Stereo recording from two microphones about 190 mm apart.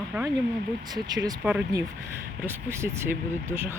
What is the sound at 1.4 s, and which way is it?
Speech, 5° right (ahead or behind).